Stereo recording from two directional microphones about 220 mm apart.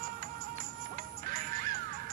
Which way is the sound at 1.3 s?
40° right (ahead or behind).